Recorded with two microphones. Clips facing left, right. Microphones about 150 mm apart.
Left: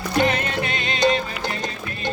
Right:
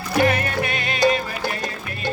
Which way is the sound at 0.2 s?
20° left (ahead or behind).